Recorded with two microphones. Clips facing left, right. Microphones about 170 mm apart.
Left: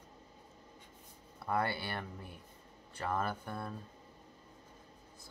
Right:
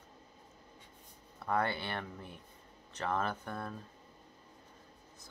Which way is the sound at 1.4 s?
10° left (ahead or behind).